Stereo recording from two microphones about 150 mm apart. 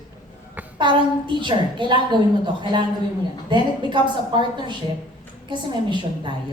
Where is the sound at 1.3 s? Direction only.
30° right (ahead or behind).